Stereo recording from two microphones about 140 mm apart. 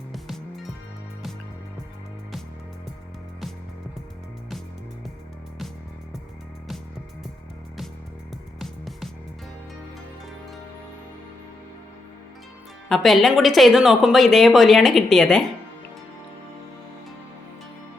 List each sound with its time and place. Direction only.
0.1 s music: centre (ahead or behind)
8.5 s music: centre (ahead or behind)
12.9 s speech: centre (ahead or behind)